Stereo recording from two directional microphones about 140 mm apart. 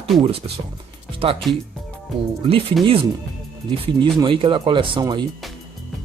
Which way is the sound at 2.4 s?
45° right (ahead or behind).